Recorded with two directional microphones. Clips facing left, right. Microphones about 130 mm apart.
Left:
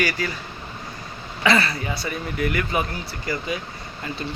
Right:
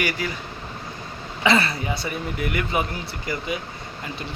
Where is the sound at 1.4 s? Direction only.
25° right (ahead or behind).